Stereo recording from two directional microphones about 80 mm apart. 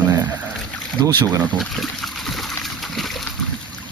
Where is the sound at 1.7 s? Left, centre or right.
Centre.